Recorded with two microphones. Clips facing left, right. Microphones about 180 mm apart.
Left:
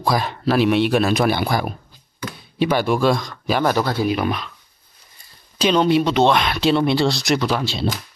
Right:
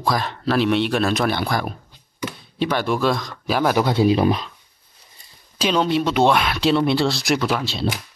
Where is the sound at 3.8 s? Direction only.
20° right (ahead or behind).